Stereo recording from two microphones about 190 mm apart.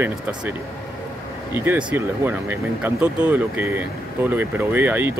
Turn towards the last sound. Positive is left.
turn(degrees=-10)  # may be behind; listen again after turning